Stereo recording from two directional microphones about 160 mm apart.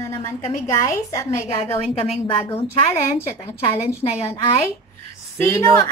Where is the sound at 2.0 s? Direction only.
40° left (ahead or behind).